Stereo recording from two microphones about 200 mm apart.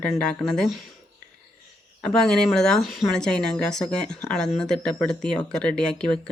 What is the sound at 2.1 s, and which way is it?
Speech, 5° left (ahead or behind).